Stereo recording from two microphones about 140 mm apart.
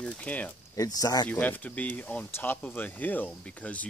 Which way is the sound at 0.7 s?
25° left (ahead or behind).